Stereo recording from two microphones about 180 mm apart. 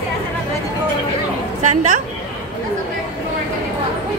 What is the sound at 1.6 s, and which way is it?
Speech, 45° right (ahead or behind).